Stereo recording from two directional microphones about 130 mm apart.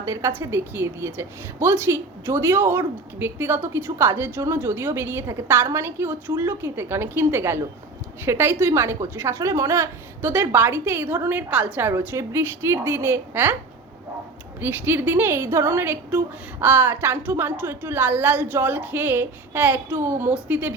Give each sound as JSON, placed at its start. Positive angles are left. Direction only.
{"t": 0.0, "sound": "a woman's voice", "side_deg": -25}
{"t": 14.6, "sound": "a woman's voice", "side_deg": -15}